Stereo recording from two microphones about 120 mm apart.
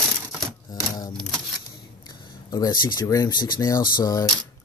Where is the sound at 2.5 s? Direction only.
35° left (ahead or behind).